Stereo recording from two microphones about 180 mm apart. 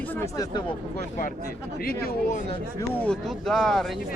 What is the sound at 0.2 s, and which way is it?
Speech, 20° left (ahead or behind).